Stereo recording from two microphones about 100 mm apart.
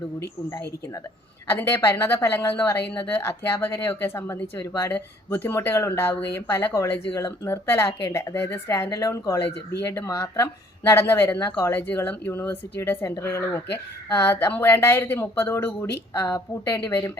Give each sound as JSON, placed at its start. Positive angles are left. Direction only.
{"t": 1.5, "sound": "speech", "side_deg": 25}
{"t": 8.9, "sound": "a woman's voice", "side_deg": 35}